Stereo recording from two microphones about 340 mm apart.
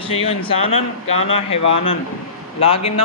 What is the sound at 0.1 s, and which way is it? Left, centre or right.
A man's voice, centre.